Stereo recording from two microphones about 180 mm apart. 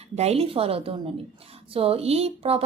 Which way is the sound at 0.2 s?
35° right (ahead or behind).